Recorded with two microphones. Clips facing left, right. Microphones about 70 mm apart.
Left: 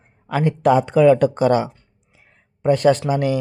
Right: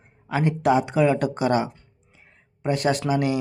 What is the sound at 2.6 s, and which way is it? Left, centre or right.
Speech, left.